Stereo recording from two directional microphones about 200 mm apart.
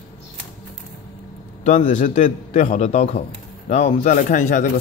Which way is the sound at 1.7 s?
35° left (ahead or behind).